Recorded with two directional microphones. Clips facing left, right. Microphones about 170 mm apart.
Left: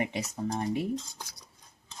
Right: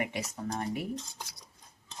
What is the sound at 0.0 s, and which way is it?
Speech, 25° left (ahead or behind).